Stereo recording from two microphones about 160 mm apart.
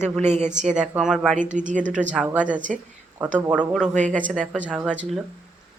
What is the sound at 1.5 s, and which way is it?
Speech, 50° right (ahead or behind).